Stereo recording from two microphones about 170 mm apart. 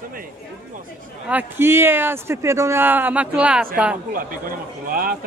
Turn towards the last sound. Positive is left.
turn(degrees=-60)  # may be behind; listen again after turning